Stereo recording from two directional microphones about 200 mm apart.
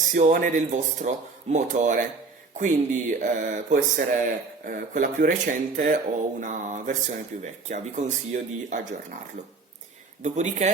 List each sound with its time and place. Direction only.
0.1 s speech: 40° right (ahead or behind)
10.2 s speech: 35° right (ahead or behind)